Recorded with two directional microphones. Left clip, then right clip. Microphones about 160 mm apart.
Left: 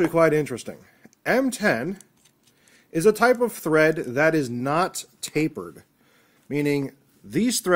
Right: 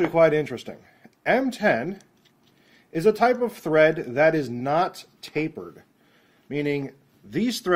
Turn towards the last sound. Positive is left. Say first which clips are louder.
# left 2 dB
turn(degrees=20)  # may be behind; listen again after turning